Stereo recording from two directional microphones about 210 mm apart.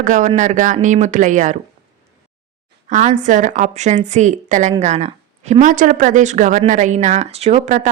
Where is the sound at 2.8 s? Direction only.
35° right (ahead or behind).